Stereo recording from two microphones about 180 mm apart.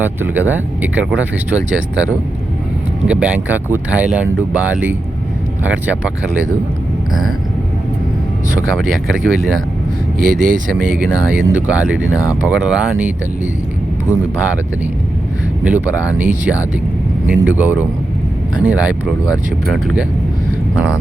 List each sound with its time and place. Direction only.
0.0 s speech: 10° right (ahead or behind)
3.1 s speech: 10° right (ahead or behind)
8.7 s speech: 5° right (ahead or behind)
10.2 s speech: 45° right (ahead or behind)
10.8 s speech: 5° right (ahead or behind)
12.1 s speech: 20° left (ahead or behind)
12.4 s speech: 5° right (ahead or behind)
15.6 s speech: 10° right (ahead or behind)